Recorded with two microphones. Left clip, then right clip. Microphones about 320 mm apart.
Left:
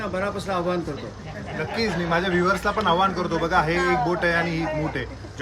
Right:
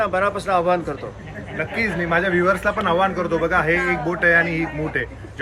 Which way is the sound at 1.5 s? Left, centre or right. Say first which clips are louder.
Right 3 dB; centre.